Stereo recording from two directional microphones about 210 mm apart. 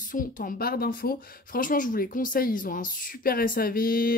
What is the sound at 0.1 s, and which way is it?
Speech, 40° left (ahead or behind).